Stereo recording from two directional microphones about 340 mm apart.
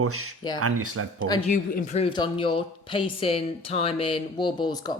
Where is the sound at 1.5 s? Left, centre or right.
Left.